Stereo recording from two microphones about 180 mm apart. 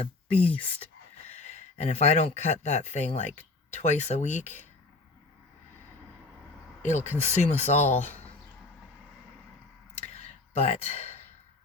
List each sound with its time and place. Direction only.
0.0 s speech: 35° left (ahead or behind)
6.8 s speech: 40° left (ahead or behind)
7.9 s speech: 10° left (ahead or behind)
10.0 s a sound: 40° left (ahead or behind)